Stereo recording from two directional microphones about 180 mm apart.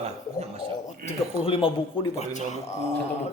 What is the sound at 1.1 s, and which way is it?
Speech, 30° left (ahead or behind).